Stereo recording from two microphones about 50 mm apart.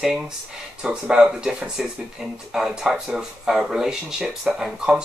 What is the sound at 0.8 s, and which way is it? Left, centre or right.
Speech, centre.